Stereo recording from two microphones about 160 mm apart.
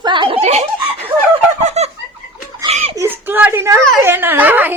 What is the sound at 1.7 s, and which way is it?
Fowl, 40° right (ahead or behind).